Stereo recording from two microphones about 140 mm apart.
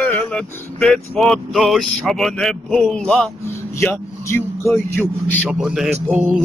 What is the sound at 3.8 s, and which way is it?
Speech, 20° left (ahead or behind).